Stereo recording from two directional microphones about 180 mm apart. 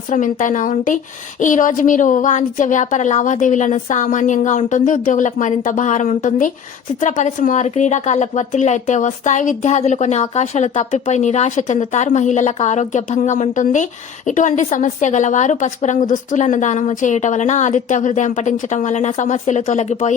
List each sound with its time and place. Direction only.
0.1 s a woman's voice: 45° left (ahead or behind)